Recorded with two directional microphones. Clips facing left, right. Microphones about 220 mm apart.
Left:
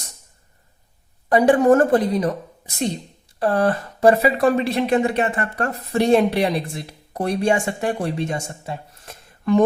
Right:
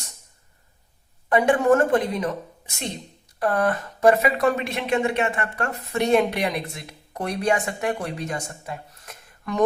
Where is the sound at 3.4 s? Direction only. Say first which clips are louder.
Left 3 dB; 30° left (ahead or behind).